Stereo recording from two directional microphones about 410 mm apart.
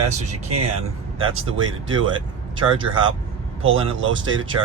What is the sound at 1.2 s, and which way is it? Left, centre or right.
Speech, right.